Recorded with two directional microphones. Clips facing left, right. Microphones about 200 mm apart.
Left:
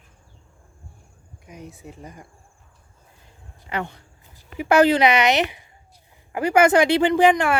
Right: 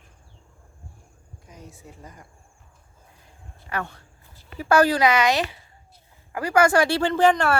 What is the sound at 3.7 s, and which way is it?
Speech, 20° left (ahead or behind).